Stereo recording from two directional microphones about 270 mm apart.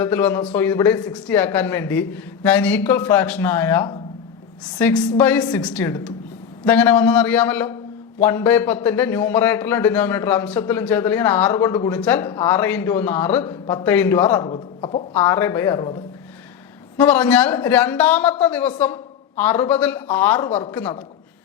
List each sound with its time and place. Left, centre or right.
0.0 s a man's voice: centre
14.4 s speech: centre
15.1 s a man's voice: centre
17.0 s a man's voice: centre